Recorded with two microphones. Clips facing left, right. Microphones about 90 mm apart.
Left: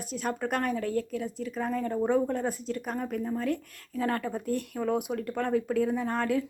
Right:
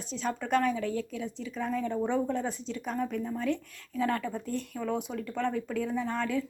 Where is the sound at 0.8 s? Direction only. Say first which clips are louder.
Left 3 dB; 45° left (ahead or behind).